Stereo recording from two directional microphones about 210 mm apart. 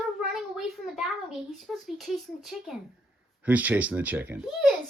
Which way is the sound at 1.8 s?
Centre (ahead or behind).